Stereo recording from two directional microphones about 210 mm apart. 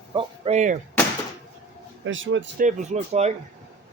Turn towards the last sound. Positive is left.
turn(degrees=-30)  # may be behind; listen again after turning